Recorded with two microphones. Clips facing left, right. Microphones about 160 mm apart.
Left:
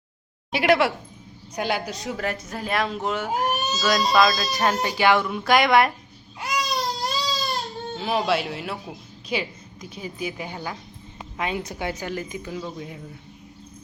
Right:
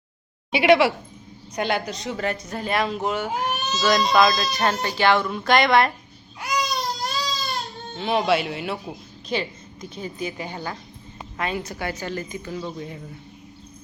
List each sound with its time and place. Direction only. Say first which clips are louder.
0.5 s a woman's voice: right 3 dB; centre (ahead or behind)
4.8 s a woman's voice: even; 15° left (ahead or behind)
6.4 s baby cry: even; centre (ahead or behind)
9.3 s a woman's voice: right 1 dB; 10° left (ahead or behind)